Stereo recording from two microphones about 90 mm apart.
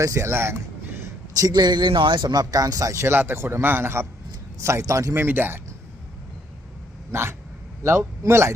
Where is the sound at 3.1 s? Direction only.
25° right (ahead or behind).